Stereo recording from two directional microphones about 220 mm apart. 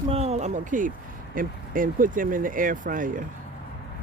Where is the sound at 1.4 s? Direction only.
40° right (ahead or behind).